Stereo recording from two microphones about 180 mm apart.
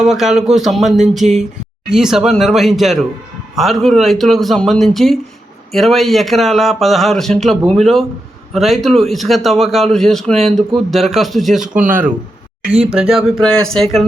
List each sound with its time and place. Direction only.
0.0 s speech: centre (ahead or behind)